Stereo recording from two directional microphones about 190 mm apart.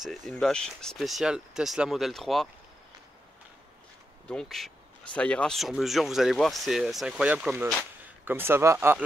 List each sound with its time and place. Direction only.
0.0 s speech: centre (ahead or behind)
4.3 s speech: centre (ahead or behind)